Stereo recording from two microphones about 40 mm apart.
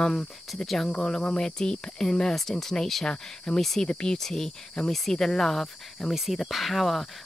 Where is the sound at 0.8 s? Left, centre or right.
Centre.